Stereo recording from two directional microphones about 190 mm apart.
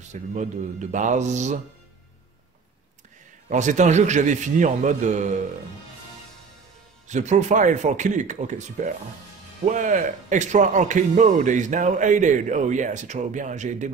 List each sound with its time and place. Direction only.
0.1 s speech: 40° right (ahead or behind)
3.4 s speech: 40° right (ahead or behind)
7.1 s speech: 40° right (ahead or behind)